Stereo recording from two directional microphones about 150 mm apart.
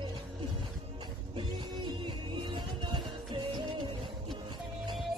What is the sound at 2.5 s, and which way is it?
Music, 30° right (ahead or behind).